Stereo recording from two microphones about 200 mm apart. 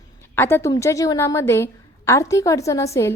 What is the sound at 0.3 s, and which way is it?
A woman's voice, 10° left (ahead or behind).